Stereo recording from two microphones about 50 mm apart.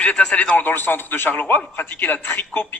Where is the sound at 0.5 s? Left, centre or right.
Left.